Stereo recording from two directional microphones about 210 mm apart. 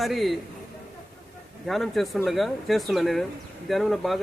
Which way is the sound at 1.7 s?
Centre (ahead or behind).